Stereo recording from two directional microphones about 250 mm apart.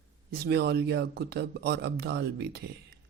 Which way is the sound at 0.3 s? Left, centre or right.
Right.